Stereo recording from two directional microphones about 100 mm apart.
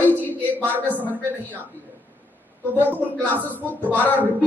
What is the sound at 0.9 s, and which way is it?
Speech, 15° right (ahead or behind).